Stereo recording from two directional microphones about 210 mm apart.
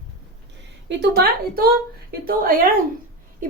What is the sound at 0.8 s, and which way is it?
A child's voice, 50° right (ahead or behind).